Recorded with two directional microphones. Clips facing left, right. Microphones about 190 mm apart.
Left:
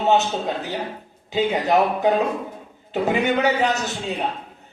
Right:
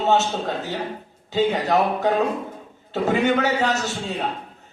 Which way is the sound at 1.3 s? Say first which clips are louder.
Even; 15° left (ahead or behind).